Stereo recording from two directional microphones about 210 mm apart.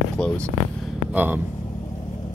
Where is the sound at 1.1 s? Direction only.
10° right (ahead or behind).